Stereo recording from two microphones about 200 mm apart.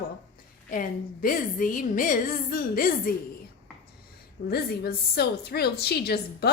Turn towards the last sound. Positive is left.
turn(degrees=50)  # may be behind; listen again after turning